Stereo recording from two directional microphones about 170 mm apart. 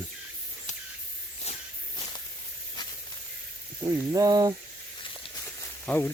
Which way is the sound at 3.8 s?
20° right (ahead or behind).